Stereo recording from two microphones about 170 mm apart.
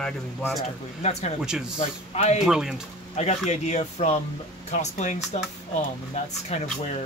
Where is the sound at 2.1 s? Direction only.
40° left (ahead or behind).